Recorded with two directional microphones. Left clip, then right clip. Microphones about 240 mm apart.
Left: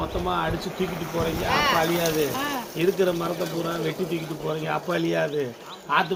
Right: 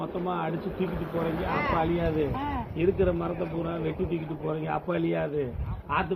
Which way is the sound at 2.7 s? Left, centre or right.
Left.